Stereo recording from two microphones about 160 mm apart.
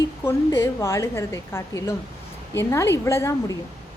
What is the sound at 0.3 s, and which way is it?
A woman's voice, 15° left (ahead or behind).